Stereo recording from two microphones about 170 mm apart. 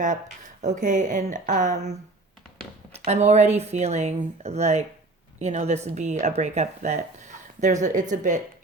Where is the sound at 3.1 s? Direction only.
40° right (ahead or behind).